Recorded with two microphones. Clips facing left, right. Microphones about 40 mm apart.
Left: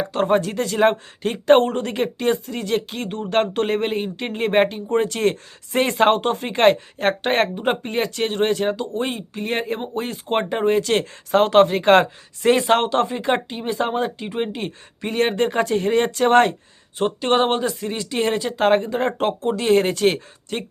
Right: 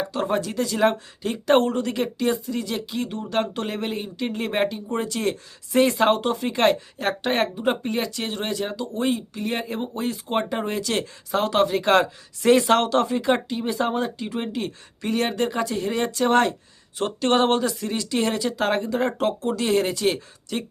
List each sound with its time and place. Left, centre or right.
0.1 s speech: left
17.0 s speech: left